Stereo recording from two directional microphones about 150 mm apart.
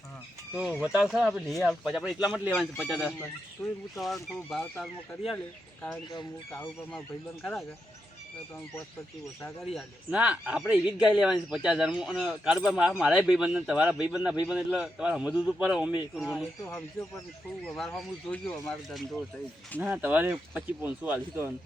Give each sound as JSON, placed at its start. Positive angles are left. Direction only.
{"t": 0.5, "sound": "a man's voice", "side_deg": -5}
{"t": 3.6, "sound": "speech", "side_deg": 20}
{"t": 3.9, "sound": "a man's voice", "side_deg": 0}
{"t": 10.1, "sound": "a man's voice", "side_deg": -10}
{"t": 17.7, "sound": "a man's voice", "side_deg": 0}
{"t": 19.8, "sound": "speech", "side_deg": -10}